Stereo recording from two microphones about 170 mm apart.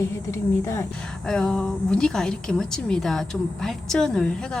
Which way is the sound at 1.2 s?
5° left (ahead or behind).